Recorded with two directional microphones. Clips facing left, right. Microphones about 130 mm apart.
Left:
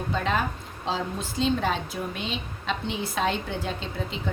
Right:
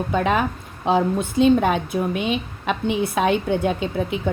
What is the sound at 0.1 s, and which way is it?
A woman's voice, 60° right (ahead or behind).